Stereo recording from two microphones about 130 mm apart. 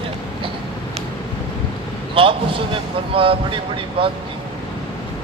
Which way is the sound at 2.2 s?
40° right (ahead or behind).